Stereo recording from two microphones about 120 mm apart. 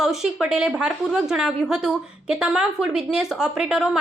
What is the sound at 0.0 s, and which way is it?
A woman's voice, 5° right (ahead or behind).